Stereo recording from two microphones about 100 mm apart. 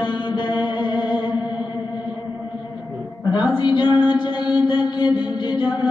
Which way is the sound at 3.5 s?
55° left (ahead or behind).